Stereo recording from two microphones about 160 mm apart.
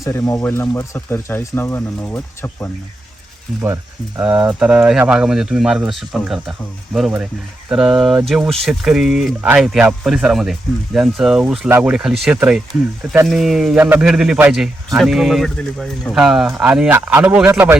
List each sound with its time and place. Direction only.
0.0 s speech: 15° left (ahead or behind)
4.2 s speech: 10° right (ahead or behind)
7.7 s speech: 5° right (ahead or behind)